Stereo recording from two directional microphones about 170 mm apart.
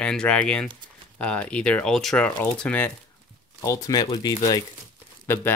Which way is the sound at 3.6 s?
20° left (ahead or behind).